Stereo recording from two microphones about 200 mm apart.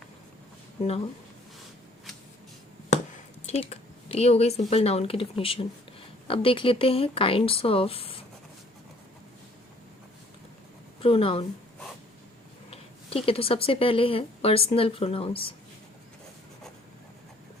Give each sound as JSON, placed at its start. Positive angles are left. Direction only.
{"t": 3.4, "sound": "speech", "side_deg": 30}
{"t": 11.0, "sound": "speech", "side_deg": 25}
{"t": 12.7, "sound": "speech", "side_deg": 30}